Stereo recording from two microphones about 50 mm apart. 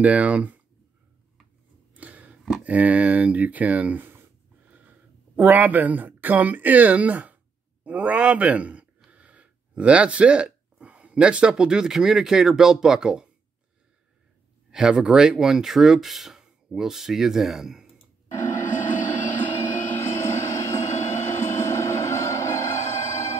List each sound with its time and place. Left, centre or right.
0.0 s a man's voice: right
2.0 s a sound: right
2.6 s speech: right
4.0 s a sound: right
4.7 s a man's voice: right; by 13.3 s centre
14.7 s speech: centre
18.6 s vehicle: left
20.0 s vehicle: left